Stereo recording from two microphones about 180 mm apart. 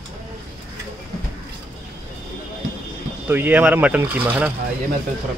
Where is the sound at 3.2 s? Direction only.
10° right (ahead or behind).